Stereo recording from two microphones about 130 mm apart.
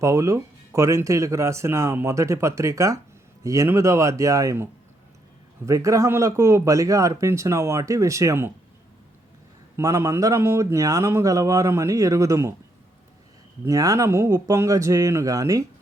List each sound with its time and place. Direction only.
0.0 s speech: 25° right (ahead or behind)
9.7 s speech: 20° right (ahead or behind)
13.7 s speech: 25° right (ahead or behind)